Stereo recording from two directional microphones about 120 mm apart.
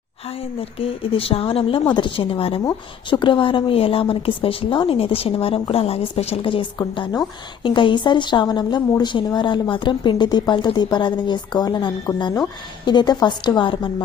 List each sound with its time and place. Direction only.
0.3 s a woman's voice: 50° left (ahead or behind)